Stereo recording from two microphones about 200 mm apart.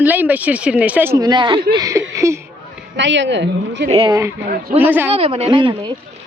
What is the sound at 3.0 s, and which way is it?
Speech, 65° right (ahead or behind).